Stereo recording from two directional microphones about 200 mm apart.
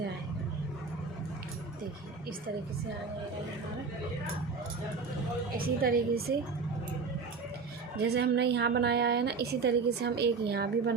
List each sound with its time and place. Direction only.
5.5 s a woman's voice: 45° right (ahead or behind)
7.9 s a woman's voice: 55° right (ahead or behind)